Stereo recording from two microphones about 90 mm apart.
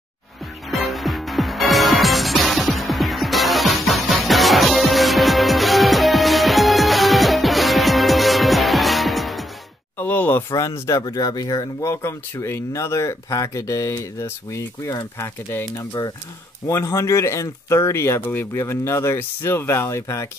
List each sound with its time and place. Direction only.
0.7 s music: centre (ahead or behind)
9.9 s speech: 20° left (ahead or behind)
10.5 s speech: 35° left (ahead or behind)
16.0 s speech: 50° left (ahead or behind)
16.6 s speech: 35° left (ahead or behind)